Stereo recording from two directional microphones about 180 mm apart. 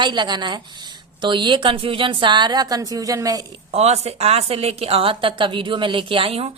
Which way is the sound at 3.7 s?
35° right (ahead or behind).